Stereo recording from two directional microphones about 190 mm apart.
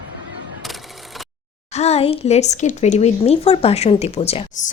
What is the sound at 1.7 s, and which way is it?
Speech, 35° left (ahead or behind).